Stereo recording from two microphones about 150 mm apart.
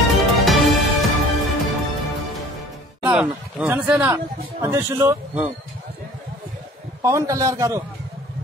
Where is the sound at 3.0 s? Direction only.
5° right (ahead or behind).